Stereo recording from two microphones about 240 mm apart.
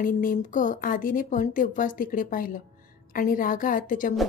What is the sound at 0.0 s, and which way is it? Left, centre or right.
A woman's voice, left.